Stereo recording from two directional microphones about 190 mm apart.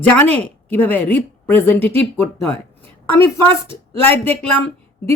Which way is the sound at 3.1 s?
10° left (ahead or behind).